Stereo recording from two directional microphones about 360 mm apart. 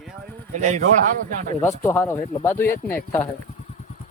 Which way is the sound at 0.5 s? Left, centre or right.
Centre.